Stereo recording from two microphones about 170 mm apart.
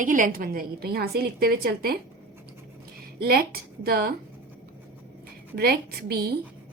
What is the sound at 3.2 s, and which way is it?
Speech, 65° right (ahead or behind).